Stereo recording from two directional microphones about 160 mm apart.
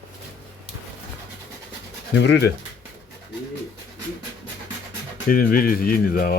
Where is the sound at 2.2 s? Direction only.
90° left.